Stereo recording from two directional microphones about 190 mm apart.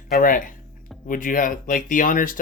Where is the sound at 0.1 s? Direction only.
45° left (ahead or behind).